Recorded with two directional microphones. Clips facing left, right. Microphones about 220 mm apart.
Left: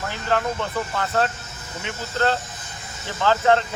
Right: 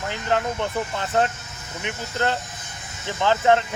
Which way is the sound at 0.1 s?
20° right (ahead or behind).